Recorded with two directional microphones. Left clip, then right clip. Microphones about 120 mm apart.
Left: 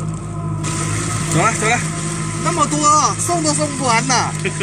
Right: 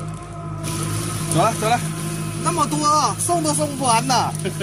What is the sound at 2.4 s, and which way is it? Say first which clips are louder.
Speech: left 3 dB; 10° left (ahead or behind).